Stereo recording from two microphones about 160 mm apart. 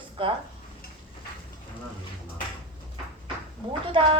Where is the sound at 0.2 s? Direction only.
35° right (ahead or behind).